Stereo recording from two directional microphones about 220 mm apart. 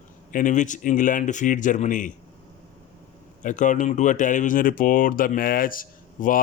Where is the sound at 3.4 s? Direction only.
35° left (ahead or behind).